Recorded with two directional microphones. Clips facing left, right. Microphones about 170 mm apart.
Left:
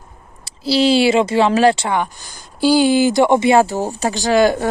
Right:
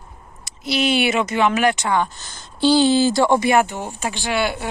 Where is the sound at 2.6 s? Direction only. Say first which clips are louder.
Left 2 dB; 10° left (ahead or behind).